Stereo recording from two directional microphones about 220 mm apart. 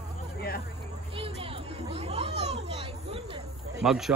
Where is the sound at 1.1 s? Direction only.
25° right (ahead or behind).